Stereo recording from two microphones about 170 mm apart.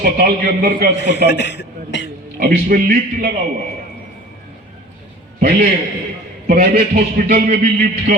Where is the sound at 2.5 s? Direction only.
55° right (ahead or behind).